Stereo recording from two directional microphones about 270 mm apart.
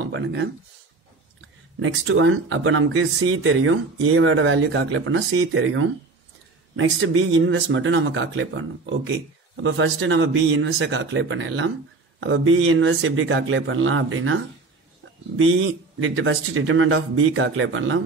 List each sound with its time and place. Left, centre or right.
0.0 s speech: right
1.8 s speech: right